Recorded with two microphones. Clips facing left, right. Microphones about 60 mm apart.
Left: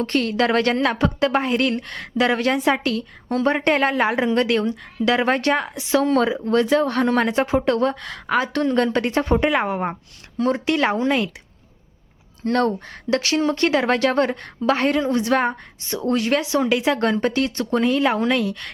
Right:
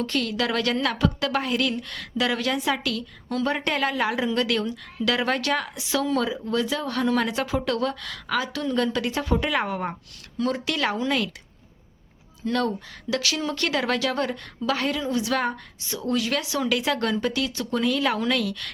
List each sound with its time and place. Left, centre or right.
0.0 s speech: left
6.1 s speech: left
12.5 s speech: left